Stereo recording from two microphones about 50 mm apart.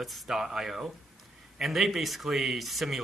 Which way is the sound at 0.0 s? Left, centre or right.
Centre.